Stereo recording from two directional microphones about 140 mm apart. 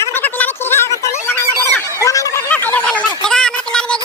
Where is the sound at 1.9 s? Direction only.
25° left (ahead or behind).